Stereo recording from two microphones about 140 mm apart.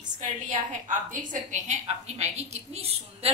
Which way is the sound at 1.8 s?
50° right (ahead or behind).